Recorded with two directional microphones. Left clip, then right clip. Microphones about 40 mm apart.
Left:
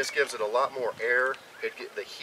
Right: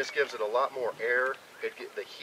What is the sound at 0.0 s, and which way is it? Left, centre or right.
A child's voice, left.